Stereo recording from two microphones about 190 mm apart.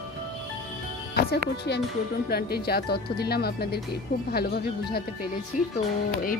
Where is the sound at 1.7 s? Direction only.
65° left (ahead or behind).